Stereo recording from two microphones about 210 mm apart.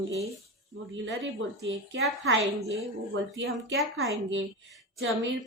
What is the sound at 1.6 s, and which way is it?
Speech, 60° right (ahead or behind).